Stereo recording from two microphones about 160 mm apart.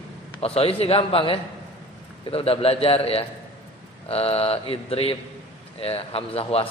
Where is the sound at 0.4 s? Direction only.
35° left (ahead or behind).